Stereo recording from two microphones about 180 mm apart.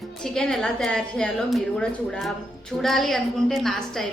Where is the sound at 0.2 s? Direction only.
5° left (ahead or behind).